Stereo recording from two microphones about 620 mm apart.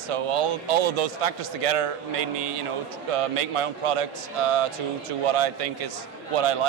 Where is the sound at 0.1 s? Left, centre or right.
Right.